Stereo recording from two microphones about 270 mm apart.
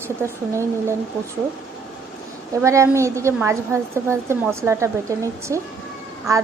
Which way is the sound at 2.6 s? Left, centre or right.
Centre.